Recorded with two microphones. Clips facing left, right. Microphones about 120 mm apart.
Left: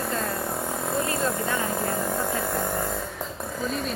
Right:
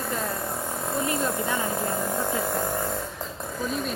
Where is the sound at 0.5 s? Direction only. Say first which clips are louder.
Left 2 dB; 5° left (ahead or behind).